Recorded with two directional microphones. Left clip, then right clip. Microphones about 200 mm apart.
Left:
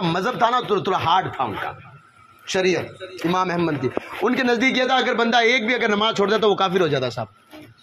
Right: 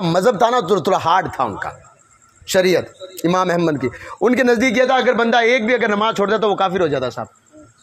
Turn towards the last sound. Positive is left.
turn(degrees=-30)  # may be behind; listen again after turning